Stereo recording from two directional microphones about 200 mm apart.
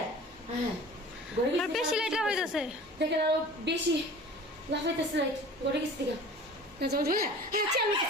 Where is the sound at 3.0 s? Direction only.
60° right (ahead or behind).